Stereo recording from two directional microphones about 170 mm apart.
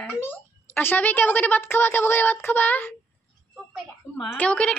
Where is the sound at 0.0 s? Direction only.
15° left (ahead or behind).